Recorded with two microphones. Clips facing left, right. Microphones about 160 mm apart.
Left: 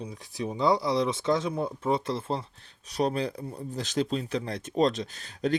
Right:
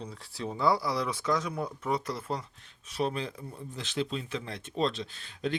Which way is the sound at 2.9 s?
40° left (ahead or behind).